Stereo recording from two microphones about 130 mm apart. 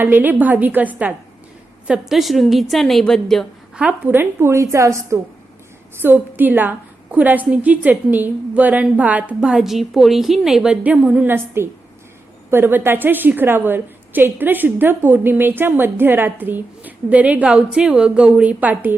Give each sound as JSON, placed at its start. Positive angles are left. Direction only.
{"t": 0.0, "sound": "a woman's voice", "side_deg": -15}
{"t": 3.8, "sound": "a woman's voice", "side_deg": -10}